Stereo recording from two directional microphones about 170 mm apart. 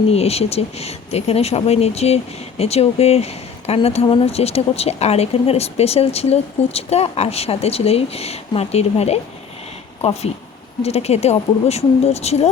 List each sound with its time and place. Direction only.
0.1 s speech: 35° left (ahead or behind)